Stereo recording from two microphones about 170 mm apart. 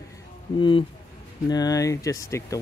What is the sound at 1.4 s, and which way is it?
Speech, 20° left (ahead or behind).